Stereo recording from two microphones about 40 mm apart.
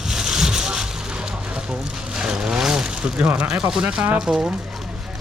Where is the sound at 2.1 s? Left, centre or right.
Centre.